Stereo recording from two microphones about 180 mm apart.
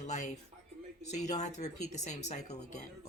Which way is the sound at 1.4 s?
40° left (ahead or behind).